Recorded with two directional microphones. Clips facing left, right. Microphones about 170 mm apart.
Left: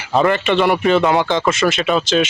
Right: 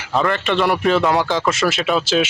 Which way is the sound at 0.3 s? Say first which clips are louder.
Left 2 dB; 5° left (ahead or behind).